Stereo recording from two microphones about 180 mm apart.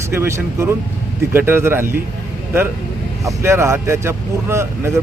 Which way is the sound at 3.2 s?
15° right (ahead or behind).